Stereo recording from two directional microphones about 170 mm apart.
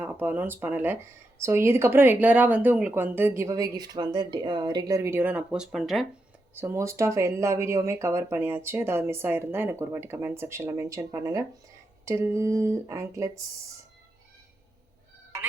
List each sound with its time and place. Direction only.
0.0 s speech: 10° right (ahead or behind)
6.5 s speech: 15° right (ahead or behind)